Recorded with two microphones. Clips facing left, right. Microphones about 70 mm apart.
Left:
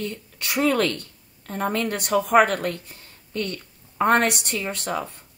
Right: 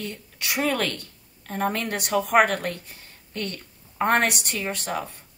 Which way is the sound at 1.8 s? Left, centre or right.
Left.